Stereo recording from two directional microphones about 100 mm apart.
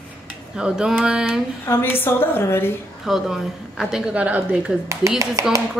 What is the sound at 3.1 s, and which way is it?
A woman's voice, 5° right (ahead or behind).